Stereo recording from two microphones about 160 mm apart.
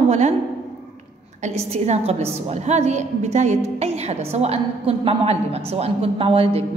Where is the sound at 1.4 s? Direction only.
45° right (ahead or behind).